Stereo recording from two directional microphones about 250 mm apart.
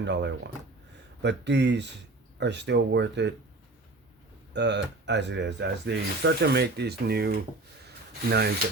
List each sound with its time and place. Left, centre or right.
0.0 s speech: right
4.5 s speech: right
7.9 s rub: right